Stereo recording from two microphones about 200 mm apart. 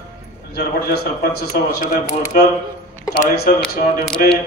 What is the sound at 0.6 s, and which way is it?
Speech, 50° left (ahead or behind).